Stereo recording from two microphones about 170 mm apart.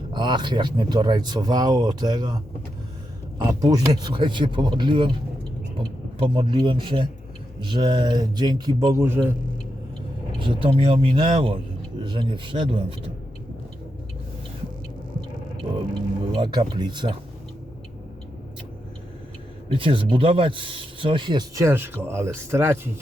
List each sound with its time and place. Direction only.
0.1 s speech: 25° right (ahead or behind)
10.4 s speech: 30° right (ahead or behind)
16.4 s speech: 25° right (ahead or behind)
19.6 s a man's voice: 30° right (ahead or behind); by 22.9 s 15° right (ahead or behind)